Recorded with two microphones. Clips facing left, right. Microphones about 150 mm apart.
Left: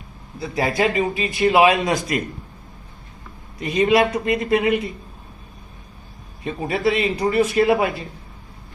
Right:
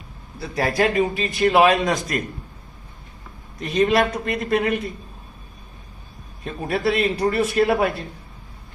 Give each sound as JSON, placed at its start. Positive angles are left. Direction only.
{"t": 0.3, "sound": "a man's voice", "side_deg": 0}
{"t": 3.6, "sound": "a man's voice", "side_deg": 0}
{"t": 6.4, "sound": "a man's voice", "side_deg": 0}